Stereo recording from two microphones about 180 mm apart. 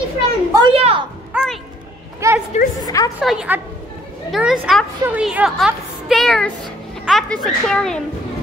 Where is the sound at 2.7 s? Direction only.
20° left (ahead or behind).